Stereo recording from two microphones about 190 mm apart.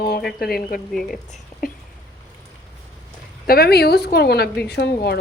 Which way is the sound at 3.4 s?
55° left (ahead or behind).